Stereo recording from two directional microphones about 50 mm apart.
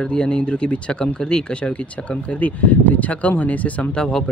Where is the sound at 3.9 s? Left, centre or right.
Centre.